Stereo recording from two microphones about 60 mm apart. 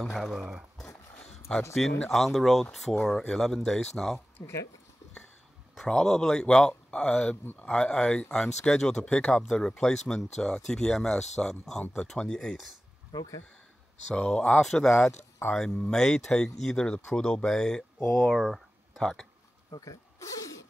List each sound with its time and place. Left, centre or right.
0.0 s speech: centre
0.4 s speech: centre
1.5 s speech: centre
2.0 s speech: centre
5.8 s speech: centre
13.1 s speech: left
14.0 s speech: centre
18.4 s a sound: centre
19.8 s speech: left